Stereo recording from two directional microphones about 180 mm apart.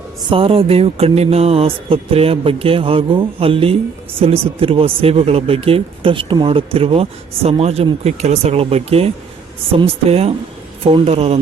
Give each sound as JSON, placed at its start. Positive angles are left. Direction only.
{"t": 0.3, "sound": "speech", "side_deg": -30}